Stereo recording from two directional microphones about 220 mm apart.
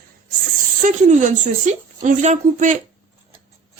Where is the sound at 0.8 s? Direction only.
35° right (ahead or behind).